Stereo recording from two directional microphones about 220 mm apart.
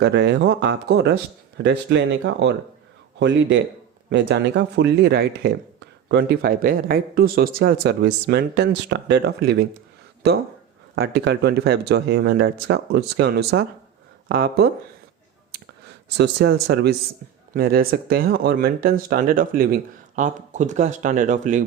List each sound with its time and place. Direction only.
0.0 s speech: 50° right (ahead or behind)
10.9 s speech: 50° right (ahead or behind)
16.1 s speech: 50° right (ahead or behind); by 21.6 s 35° right (ahead or behind)